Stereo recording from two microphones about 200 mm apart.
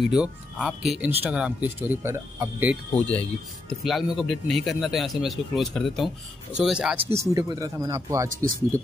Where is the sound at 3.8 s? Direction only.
Centre (ahead or behind); by 8.2 s 15° right (ahead or behind).